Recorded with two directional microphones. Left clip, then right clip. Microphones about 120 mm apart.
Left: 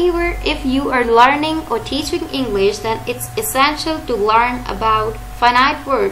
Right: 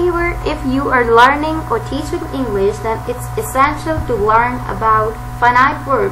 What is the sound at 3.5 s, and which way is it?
A woman's voice, 25° left (ahead or behind).